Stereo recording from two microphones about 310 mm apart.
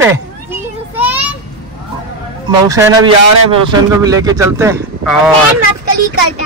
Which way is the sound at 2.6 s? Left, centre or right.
Centre.